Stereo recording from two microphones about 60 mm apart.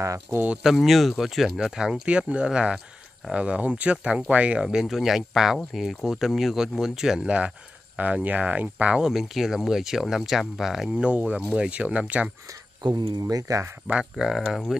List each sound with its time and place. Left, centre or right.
0.0 s speech: right
0.7 s speech: centre
2.0 s speech: centre
4.6 s speech: centre; by 9.0 s right
9.0 s speech: centre
11.0 s speech: right
13.2 s speech: right
14.1 s speech: centre